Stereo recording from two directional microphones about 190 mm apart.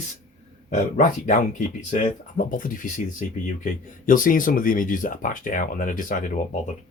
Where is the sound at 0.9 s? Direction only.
40° left (ahead or behind).